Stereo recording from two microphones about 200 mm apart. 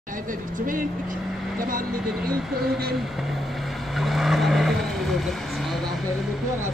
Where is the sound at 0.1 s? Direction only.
40° right (ahead or behind).